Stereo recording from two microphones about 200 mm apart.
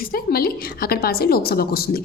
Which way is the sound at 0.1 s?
50° left (ahead or behind).